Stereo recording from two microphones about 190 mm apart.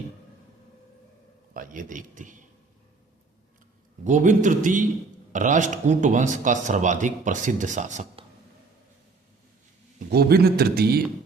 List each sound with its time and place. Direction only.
1.5 s a man's voice: 45° right (ahead or behind)
4.0 s speech: 40° right (ahead or behind)
10.1 s a man's voice: 55° right (ahead or behind)